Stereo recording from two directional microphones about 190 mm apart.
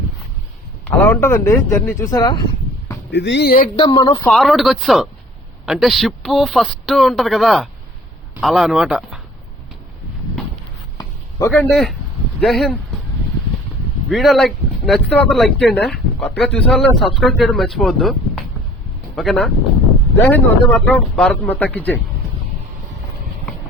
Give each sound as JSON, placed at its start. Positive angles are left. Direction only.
{"t": 0.9, "sound": "speech", "side_deg": 10}
{"t": 3.1, "sound": "speech", "side_deg": 65}
{"t": 3.8, "sound": "speech", "side_deg": 20}
{"t": 4.3, "sound": "speech", "side_deg": 0}
{"t": 10.9, "sound": "a sound", "side_deg": 15}
{"t": 11.5, "sound": "speech", "side_deg": 5}
{"t": 14.1, "sound": "speech", "side_deg": 0}